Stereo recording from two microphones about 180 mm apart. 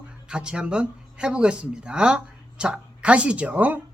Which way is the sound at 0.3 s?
5° right (ahead or behind).